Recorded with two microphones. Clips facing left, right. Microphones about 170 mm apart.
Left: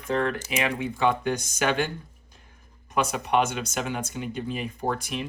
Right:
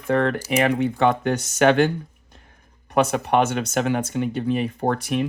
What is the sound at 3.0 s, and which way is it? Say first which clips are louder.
Speech: right 4 dB; 60° right (ahead or behind).